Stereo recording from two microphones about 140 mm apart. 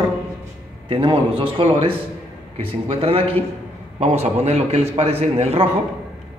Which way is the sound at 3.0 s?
40° right (ahead or behind).